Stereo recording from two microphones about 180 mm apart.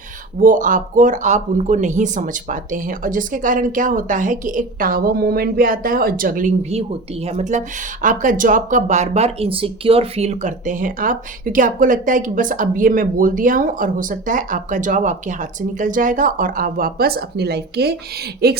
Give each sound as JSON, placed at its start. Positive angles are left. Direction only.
{"t": 0.3, "sound": "speech", "side_deg": -45}